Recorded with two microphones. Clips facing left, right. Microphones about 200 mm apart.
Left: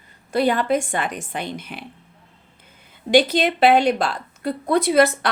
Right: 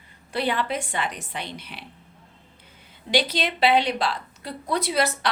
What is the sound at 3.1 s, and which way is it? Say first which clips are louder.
A woman's voice: left 8 dB; 50° left (ahead or behind).